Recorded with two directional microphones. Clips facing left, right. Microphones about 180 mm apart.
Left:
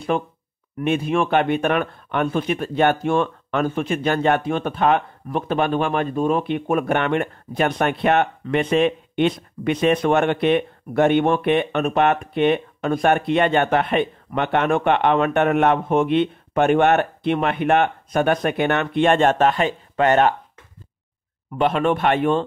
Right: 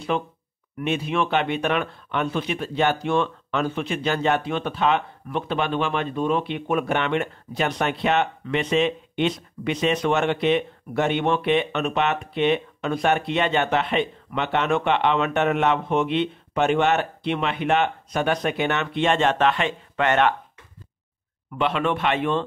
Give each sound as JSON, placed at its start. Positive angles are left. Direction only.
{"t": 0.1, "sound": "speech", "side_deg": 50}
{"t": 21.5, "sound": "speech", "side_deg": 45}